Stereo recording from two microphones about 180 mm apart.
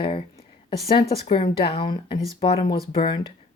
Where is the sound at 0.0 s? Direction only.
35° left (ahead or behind).